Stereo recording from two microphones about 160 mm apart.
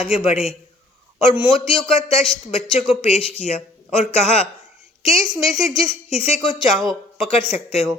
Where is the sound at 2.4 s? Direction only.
35° left (ahead or behind).